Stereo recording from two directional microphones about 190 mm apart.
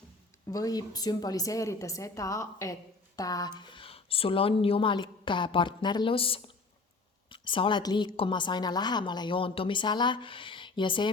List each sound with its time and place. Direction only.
0.4 s a woman's voice: 20° left (ahead or behind)